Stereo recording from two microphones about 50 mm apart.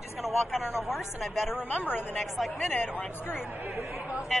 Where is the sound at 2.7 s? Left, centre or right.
Left.